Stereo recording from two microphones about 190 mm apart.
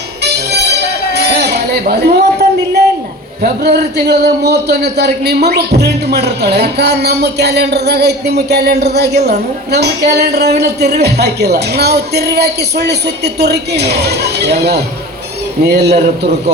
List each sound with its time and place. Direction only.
0.8 s music: 60° right (ahead or behind)
3.4 s a man's voice: 60° right (ahead or behind)